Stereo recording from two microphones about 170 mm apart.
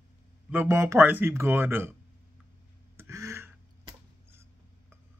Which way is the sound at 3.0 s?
15° right (ahead or behind).